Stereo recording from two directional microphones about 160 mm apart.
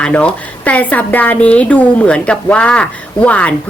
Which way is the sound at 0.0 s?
5° left (ahead or behind).